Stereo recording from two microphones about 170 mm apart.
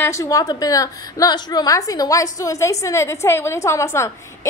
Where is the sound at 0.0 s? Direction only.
20° left (ahead or behind).